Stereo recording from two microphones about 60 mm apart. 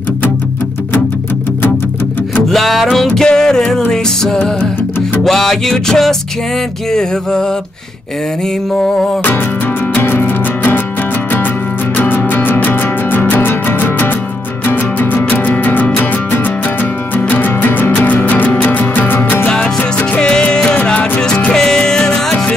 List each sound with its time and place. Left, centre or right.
2.5 s music: centre
9.9 s music: left
12.0 s music: left
20.2 s music: centre